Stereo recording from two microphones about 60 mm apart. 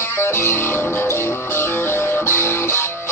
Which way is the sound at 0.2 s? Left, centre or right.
Left.